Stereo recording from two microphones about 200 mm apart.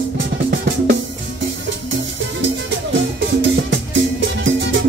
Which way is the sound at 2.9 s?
70° right (ahead or behind).